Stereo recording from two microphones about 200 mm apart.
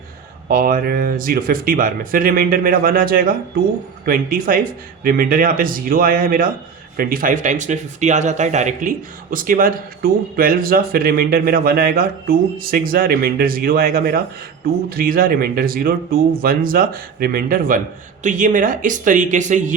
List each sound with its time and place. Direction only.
0.4 s speech: 45° right (ahead or behind)